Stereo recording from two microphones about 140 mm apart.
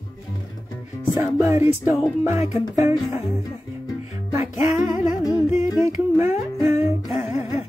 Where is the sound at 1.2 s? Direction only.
20° right (ahead or behind).